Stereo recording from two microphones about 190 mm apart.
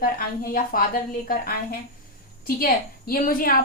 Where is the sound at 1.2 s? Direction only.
50° left (ahead or behind).